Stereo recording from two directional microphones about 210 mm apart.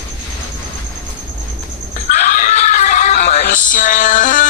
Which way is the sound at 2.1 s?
35° left (ahead or behind).